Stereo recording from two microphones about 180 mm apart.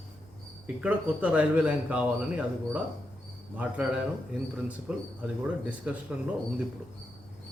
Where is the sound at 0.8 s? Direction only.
10° right (ahead or behind).